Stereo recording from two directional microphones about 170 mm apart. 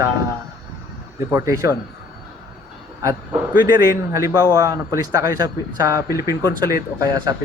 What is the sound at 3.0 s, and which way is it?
Speech, 20° right (ahead or behind).